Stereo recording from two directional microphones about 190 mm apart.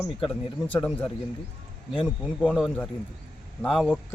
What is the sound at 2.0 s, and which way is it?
Speech, 5° left (ahead or behind).